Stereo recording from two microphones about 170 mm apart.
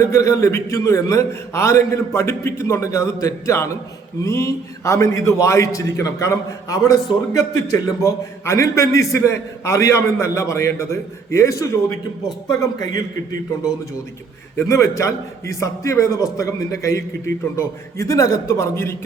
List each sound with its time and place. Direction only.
0.0 s a man's voice: 15° left (ahead or behind)
14.5 s a man's voice: 15° left (ahead or behind)